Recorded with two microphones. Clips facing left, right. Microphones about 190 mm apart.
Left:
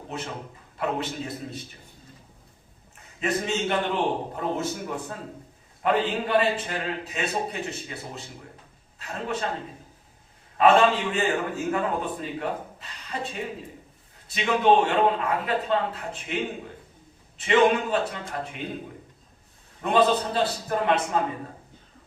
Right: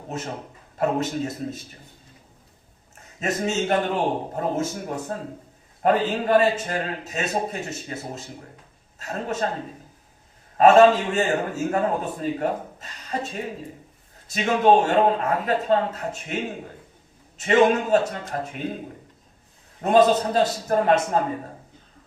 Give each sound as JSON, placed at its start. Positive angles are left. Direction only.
{"t": 0.1, "sound": "a man's voice", "side_deg": -40}
{"t": 3.2, "sound": "a man's voice", "side_deg": -45}
{"t": 10.6, "sound": "a man's voice", "side_deg": -45}
{"t": 19.8, "sound": "a man's voice", "side_deg": -40}